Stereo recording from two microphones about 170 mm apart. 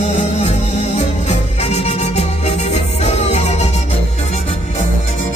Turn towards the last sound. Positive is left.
turn(degrees=40)  # may be behind; listen again after turning